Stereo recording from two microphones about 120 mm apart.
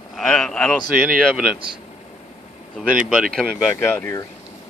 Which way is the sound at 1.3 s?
10° right (ahead or behind).